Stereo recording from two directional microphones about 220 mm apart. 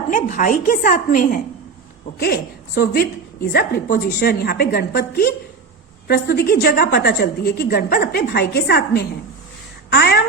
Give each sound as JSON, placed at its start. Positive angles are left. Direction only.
{"t": 0.1, "sound": "a woman's voice", "side_deg": 35}